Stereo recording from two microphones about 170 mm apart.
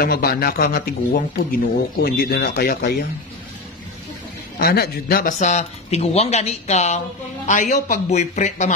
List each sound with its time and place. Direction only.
0.0 s speech: 60° left (ahead or behind)
4.6 s speech: 65° left (ahead or behind)
5.4 s speech: 40° left (ahead or behind)